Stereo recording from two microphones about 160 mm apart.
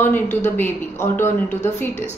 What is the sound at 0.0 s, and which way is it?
Speech, 10° left (ahead or behind).